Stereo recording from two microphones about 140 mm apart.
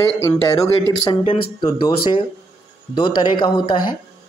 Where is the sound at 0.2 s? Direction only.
20° left (ahead or behind).